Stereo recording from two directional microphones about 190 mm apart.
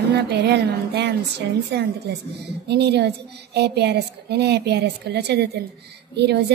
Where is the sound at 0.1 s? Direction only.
60° right (ahead or behind).